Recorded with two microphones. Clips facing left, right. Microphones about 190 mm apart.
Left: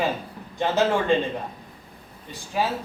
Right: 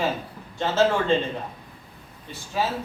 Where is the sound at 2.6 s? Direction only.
15° left (ahead or behind).